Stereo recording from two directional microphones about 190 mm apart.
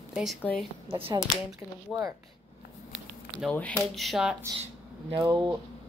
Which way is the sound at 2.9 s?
Centre (ahead or behind).